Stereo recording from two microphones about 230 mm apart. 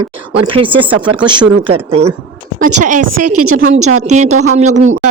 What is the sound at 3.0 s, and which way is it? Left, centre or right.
A woman's voice, right.